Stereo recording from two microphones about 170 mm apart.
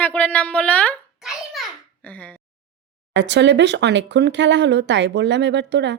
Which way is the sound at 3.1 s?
90° right.